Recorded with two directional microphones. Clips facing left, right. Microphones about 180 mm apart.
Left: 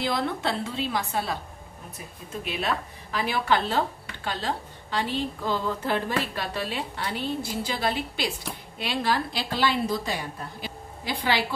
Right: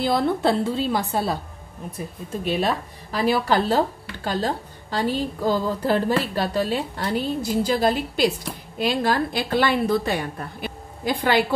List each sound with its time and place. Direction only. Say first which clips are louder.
0.4 s speech: right 7 dB; 35° right (ahead or behind)
2.4 s a woman's voice: right 6 dB; 35° right (ahead or behind)